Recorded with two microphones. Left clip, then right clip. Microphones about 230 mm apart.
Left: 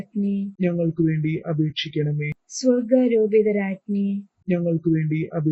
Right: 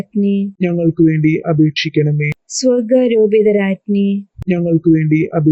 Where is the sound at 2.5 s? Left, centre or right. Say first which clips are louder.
Right 7 dB; right.